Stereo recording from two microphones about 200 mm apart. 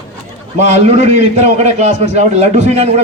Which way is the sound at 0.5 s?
35° right (ahead or behind).